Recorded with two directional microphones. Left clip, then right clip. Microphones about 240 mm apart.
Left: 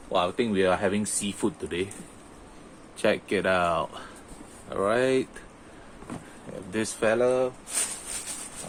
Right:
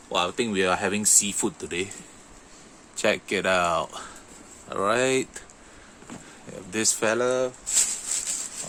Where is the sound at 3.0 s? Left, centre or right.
Right.